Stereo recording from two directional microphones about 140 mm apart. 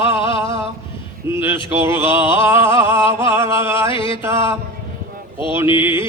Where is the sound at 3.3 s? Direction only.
20° right (ahead or behind).